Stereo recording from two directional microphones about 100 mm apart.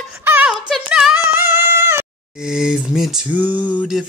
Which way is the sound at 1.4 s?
25° right (ahead or behind).